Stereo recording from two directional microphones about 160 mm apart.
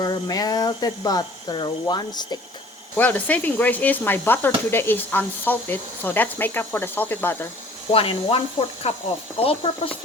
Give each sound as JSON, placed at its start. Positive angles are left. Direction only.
{"t": 0.0, "sound": "speech", "side_deg": 25}
{"t": 2.9, "sound": "speech", "side_deg": 10}
{"t": 7.9, "sound": "speech", "side_deg": 35}